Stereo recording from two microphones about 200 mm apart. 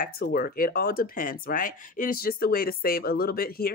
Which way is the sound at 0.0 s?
50° left (ahead or behind).